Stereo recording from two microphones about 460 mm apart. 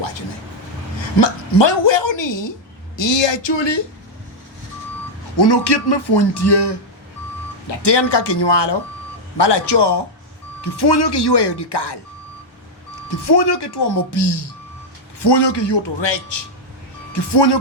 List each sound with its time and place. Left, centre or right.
1.2 s speech: left
5.4 s speech: left
13.1 s speech: left